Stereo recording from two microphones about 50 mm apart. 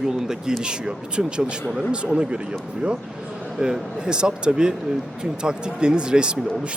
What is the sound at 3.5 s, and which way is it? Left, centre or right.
Speech, centre.